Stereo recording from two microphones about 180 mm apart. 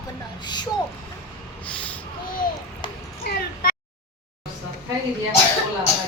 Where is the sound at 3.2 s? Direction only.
55° left (ahead or behind).